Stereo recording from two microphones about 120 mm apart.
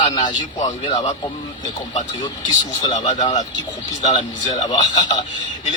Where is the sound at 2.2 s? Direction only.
35° left (ahead or behind).